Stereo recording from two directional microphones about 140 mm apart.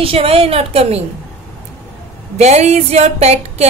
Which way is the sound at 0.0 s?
40° right (ahead or behind).